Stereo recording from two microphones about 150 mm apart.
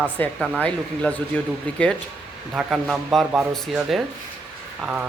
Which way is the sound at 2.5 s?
5° right (ahead or behind).